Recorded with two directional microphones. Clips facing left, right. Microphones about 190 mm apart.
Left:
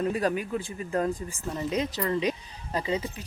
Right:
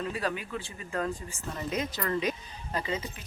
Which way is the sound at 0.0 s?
45° left (ahead or behind).